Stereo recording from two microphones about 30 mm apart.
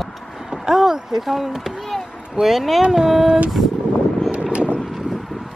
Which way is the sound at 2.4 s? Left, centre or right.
Centre.